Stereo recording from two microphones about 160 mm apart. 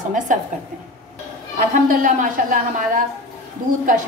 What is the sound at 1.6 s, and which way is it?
A woman's voice, 60° right (ahead or behind).